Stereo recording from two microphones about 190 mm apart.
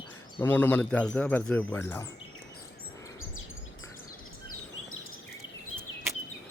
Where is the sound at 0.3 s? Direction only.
10° left (ahead or behind).